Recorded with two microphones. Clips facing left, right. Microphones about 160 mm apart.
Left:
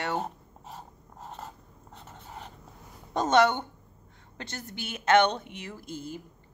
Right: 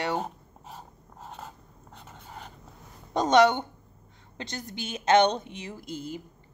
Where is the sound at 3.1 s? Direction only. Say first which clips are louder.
Right 2 dB; 15° right (ahead or behind).